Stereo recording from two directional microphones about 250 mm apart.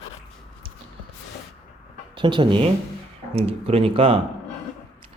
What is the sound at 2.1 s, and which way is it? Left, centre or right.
Speech, centre.